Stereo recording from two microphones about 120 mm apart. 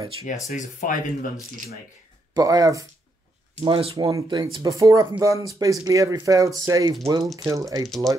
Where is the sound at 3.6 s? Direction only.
50° right (ahead or behind).